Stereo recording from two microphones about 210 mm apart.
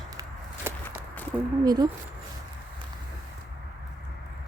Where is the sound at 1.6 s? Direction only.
20° right (ahead or behind).